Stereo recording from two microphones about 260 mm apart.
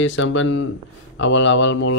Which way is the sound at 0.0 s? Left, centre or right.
Left.